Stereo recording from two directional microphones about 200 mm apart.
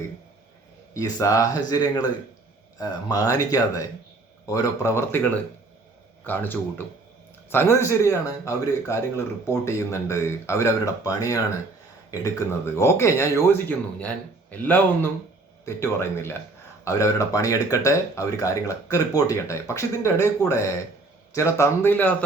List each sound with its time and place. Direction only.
0.9 s speech: 15° left (ahead or behind)
6.2 s speech: 10° left (ahead or behind)